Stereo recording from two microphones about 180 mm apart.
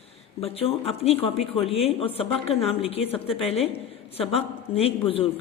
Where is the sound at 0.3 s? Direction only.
35° left (ahead or behind).